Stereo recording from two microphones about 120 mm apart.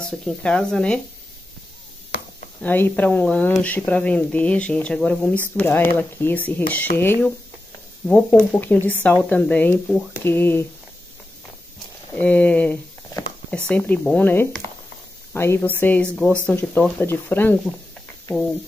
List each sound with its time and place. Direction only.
0.0 s speech: 5° left (ahead or behind)
2.6 s speech: 15° left (ahead or behind)
12.1 s speech: 15° left (ahead or behind)